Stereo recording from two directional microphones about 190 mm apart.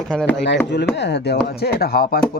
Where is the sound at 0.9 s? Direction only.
65° left (ahead or behind).